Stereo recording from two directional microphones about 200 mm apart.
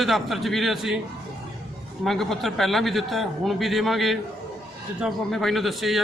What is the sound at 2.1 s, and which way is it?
Speech, centre (ahead or behind).